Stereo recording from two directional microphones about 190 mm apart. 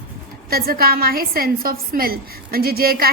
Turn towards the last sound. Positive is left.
turn(degrees=-50)  # may be behind; listen again after turning